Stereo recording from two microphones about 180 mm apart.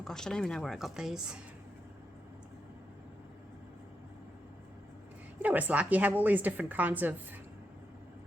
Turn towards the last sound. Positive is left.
turn(degrees=-10)  # may be behind; listen again after turning